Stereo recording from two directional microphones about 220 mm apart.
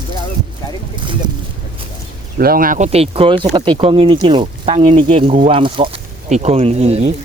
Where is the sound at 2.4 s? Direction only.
40° right (ahead or behind).